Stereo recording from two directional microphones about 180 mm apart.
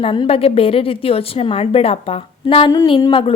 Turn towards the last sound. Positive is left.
turn(degrees=25)  # may be behind; listen again after turning